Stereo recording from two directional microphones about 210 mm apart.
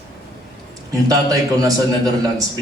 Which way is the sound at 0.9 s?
15° right (ahead or behind).